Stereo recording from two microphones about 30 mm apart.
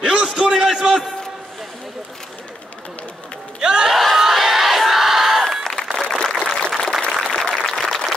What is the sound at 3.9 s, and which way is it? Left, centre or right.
Crowd, centre.